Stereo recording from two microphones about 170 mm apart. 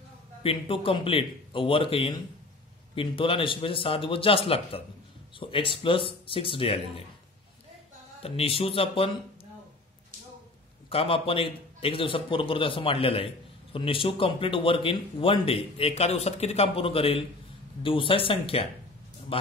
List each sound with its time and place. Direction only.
0.4 s speech: 30° left (ahead or behind)
8.2 s speech: 35° left (ahead or behind)
10.9 s speech: 35° left (ahead or behind)